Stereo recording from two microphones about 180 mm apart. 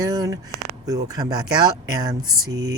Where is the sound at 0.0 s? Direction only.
20° right (ahead or behind).